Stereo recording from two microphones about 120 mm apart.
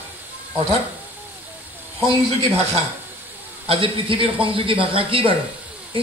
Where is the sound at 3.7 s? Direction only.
45° right (ahead or behind).